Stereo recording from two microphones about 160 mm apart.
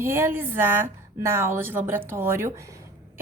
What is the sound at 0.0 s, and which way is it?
A woman's voice, 15° right (ahead or behind).